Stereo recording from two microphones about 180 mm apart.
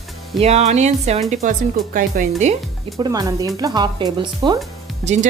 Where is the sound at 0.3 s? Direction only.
35° right (ahead or behind).